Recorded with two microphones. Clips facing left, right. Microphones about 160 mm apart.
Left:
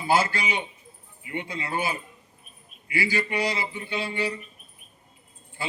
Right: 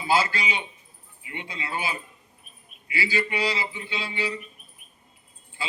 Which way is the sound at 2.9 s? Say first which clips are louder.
Left 1 dB; 50° left (ahead or behind).